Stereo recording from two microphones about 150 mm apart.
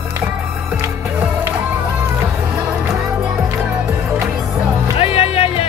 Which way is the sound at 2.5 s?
Centre (ahead or behind).